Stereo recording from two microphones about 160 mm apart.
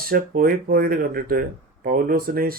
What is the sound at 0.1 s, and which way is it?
Speech, 65° right (ahead or behind).